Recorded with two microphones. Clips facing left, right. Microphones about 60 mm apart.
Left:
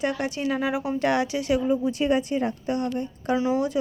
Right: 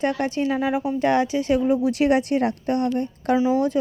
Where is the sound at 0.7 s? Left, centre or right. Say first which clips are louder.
Right 3 dB; centre.